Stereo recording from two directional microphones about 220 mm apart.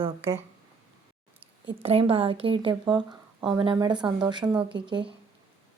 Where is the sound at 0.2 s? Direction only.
10° right (ahead or behind).